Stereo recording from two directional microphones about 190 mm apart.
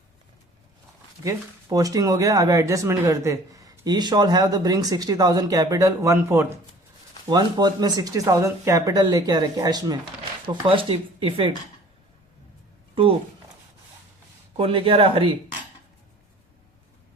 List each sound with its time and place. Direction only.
1.2 s speech: 15° right (ahead or behind)
14.5 s speech: 30° right (ahead or behind)